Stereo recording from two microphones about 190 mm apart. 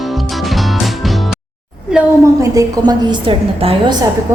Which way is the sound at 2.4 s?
20° right (ahead or behind).